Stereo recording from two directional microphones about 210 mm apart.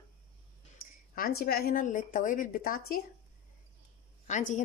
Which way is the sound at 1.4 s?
45° left (ahead or behind).